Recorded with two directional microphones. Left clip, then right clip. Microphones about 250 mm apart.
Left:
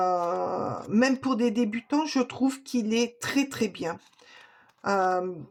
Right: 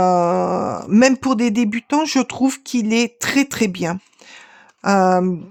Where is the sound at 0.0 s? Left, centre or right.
Right.